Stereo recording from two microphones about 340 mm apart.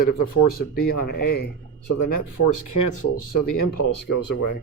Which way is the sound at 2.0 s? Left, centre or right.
Left.